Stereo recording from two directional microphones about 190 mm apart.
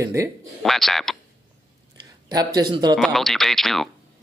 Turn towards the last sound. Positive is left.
turn(degrees=0)  # may be behind; listen again after turning